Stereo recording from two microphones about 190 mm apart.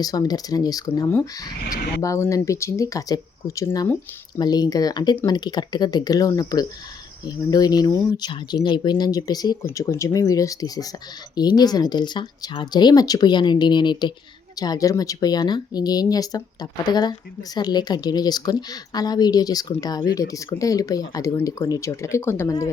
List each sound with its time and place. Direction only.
0.0 s speech: 20° left (ahead or behind)